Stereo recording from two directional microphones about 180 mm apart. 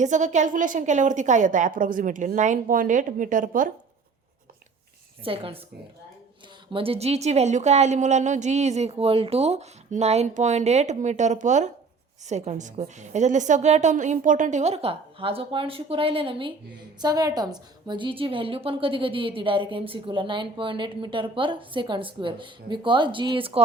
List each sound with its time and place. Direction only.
0.0 s a woman's voice: 40° right (ahead or behind)
5.2 s a woman's voice: 30° right (ahead or behind)
6.7 s a woman's voice: 30° right (ahead or behind)